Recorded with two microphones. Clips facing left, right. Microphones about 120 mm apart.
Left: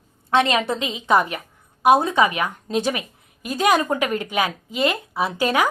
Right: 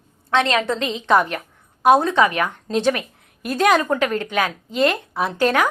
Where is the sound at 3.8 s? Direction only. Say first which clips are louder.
Right 2 dB; 15° left (ahead or behind).